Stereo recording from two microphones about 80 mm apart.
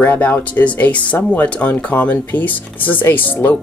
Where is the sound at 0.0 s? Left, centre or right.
Centre.